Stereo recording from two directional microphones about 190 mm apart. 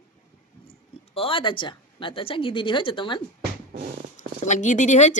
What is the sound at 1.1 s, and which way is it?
A woman's voice, 30° left (ahead or behind).